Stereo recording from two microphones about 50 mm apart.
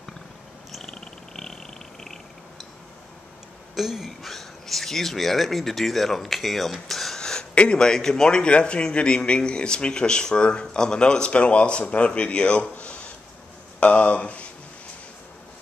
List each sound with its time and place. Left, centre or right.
0.7 s cat: centre
1.3 s a sound: centre
3.7 s speech: centre
7.2 s a man's voice: centre